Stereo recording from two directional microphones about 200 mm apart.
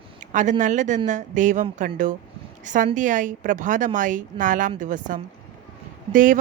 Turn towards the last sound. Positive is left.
turn(degrees=-40)  # may be behind; listen again after turning